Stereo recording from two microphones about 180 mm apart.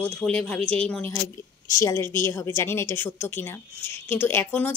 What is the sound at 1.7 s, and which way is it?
Speech, 15° left (ahead or behind).